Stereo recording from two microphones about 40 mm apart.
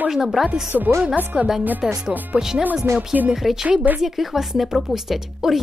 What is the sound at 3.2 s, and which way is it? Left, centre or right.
Speech, right.